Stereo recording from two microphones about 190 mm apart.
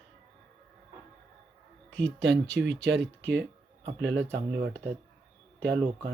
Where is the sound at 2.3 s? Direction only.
70° right (ahead or behind).